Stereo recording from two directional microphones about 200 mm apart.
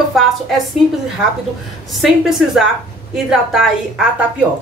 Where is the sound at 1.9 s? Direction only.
Centre (ahead or behind).